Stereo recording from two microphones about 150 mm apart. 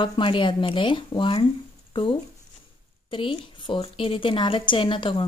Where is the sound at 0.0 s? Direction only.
35° left (ahead or behind).